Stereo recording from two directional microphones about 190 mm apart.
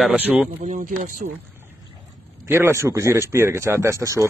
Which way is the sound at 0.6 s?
40° right (ahead or behind).